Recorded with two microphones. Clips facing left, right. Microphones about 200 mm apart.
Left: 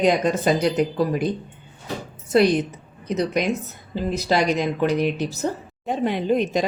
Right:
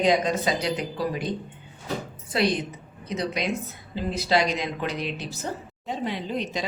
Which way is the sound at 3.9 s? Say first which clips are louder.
Left 2 dB; 50° left (ahead or behind).